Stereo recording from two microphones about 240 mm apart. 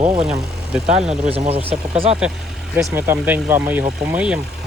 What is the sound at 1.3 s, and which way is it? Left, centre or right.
Speech, right.